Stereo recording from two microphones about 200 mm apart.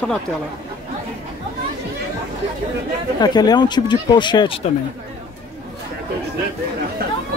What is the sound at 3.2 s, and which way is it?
Speech, 20° left (ahead or behind).